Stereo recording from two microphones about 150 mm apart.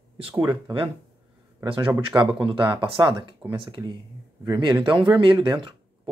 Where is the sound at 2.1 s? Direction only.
35° right (ahead or behind).